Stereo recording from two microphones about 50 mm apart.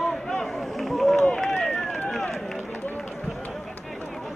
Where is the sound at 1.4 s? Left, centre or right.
Centre.